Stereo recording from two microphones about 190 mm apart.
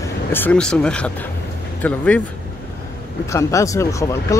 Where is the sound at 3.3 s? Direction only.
15° left (ahead or behind).